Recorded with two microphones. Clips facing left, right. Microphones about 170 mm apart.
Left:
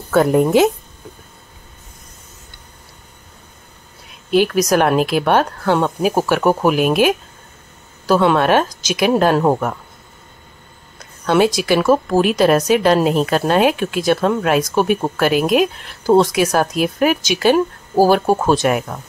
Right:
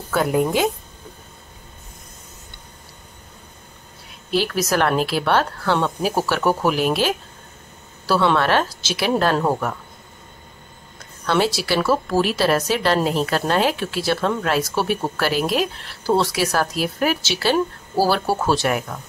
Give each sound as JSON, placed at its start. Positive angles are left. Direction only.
{"t": 0.3, "sound": "speech", "side_deg": 20}
{"t": 4.3, "sound": "a woman's voice", "side_deg": 15}
{"t": 11.2, "sound": "a woman's voice", "side_deg": 15}